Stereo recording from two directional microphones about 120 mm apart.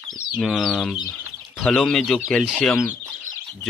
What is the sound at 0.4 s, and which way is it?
Speech, centre (ahead or behind).